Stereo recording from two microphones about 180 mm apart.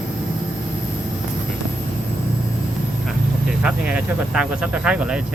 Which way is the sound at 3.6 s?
5° right (ahead or behind).